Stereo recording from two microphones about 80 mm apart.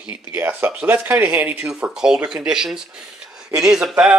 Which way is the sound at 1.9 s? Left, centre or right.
Centre.